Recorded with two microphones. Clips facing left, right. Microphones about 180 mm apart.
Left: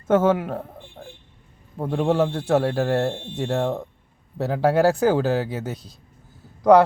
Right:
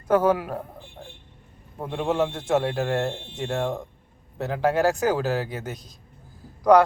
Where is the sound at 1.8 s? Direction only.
35° left (ahead or behind).